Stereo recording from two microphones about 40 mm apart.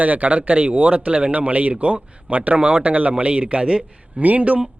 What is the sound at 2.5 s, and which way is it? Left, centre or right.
Speech, right.